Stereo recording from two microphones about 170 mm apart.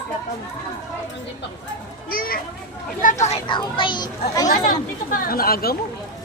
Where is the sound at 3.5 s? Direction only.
30° left (ahead or behind).